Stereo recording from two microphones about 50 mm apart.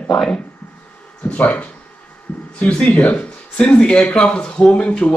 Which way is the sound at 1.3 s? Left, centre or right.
Left.